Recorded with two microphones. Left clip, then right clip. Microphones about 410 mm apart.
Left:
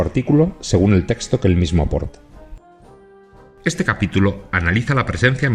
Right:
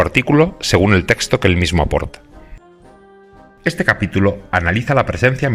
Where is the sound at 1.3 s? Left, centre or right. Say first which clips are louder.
Right 4 dB; centre.